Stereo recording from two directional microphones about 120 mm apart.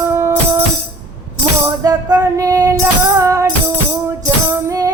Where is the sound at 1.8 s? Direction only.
35° right (ahead or behind).